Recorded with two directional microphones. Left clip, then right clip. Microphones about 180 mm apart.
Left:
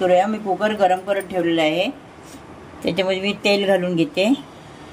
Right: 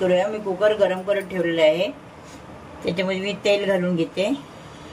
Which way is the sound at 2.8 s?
45° left (ahead or behind).